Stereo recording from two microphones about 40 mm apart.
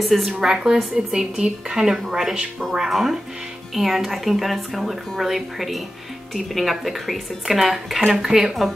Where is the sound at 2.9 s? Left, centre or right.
Centre.